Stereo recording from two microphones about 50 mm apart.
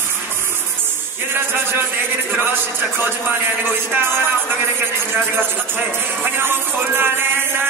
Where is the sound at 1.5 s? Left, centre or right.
Right.